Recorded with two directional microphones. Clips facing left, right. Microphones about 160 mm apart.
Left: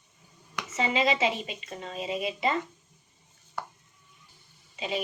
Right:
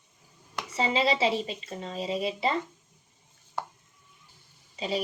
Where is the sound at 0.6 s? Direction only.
30° right (ahead or behind).